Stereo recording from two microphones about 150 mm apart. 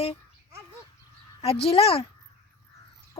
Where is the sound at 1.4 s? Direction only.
40° left (ahead or behind).